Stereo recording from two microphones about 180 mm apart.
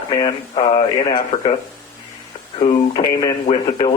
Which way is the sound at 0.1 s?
25° left (ahead or behind).